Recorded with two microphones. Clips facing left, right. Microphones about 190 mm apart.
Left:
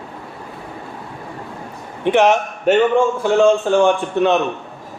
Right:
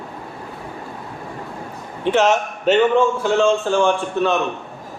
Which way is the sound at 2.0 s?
15° left (ahead or behind).